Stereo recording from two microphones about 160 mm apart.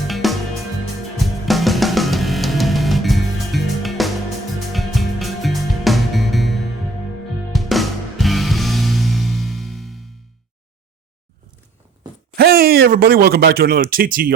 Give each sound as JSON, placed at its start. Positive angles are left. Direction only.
{"t": 0.1, "sound": "music", "side_deg": 0}
{"t": 12.4, "sound": "speech", "side_deg": -70}